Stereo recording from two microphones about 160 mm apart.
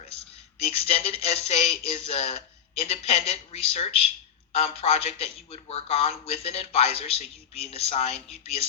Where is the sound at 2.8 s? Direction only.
45° left (ahead or behind).